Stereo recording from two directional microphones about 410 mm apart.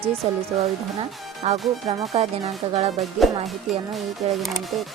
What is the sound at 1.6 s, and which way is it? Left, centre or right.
Speech, centre.